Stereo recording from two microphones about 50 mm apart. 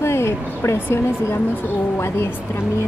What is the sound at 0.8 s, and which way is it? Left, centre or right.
Speech, left.